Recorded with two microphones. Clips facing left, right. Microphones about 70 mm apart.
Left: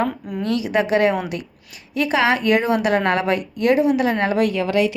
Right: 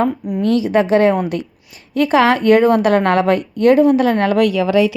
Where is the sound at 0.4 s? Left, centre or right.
Right.